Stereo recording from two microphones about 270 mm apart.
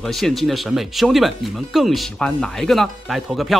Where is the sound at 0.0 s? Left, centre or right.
Centre.